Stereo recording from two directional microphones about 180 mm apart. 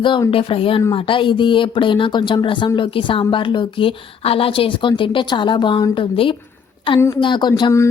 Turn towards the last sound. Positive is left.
turn(degrees=20)  # may be behind; listen again after turning